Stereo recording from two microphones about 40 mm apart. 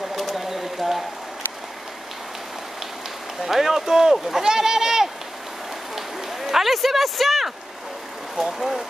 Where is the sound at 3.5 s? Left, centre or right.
Centre.